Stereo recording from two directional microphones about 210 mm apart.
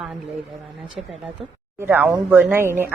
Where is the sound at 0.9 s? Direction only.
Centre (ahead or behind).